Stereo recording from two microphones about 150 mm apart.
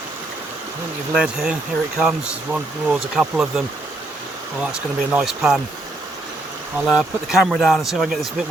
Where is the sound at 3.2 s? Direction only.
5° right (ahead or behind).